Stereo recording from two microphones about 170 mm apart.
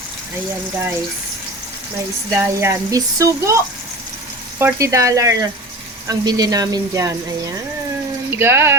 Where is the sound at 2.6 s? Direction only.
20° right (ahead or behind).